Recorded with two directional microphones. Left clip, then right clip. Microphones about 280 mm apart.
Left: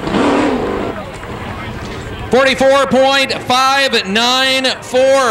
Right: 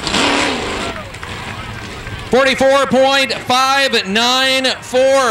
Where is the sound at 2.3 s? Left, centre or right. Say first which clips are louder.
Left 1 dB; centre.